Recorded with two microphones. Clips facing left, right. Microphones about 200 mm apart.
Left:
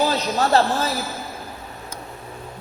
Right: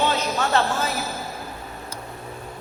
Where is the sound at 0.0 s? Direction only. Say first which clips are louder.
Left 2 dB; 35° left (ahead or behind).